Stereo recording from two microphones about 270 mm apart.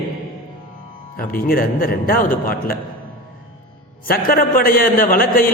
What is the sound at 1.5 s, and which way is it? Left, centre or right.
A man's voice, left.